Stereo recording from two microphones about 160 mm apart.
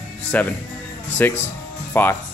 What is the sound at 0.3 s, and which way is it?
Speech, 10° left (ahead or behind).